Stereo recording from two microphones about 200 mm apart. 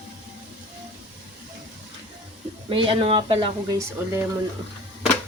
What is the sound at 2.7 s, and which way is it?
Speech, 25° right (ahead or behind).